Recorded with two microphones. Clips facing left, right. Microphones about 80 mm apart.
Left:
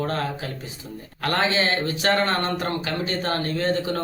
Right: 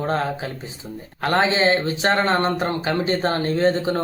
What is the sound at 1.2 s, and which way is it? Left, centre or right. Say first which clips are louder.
Speech: right 4 dB; right.